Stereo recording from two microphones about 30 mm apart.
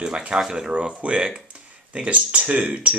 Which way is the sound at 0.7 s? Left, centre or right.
Right.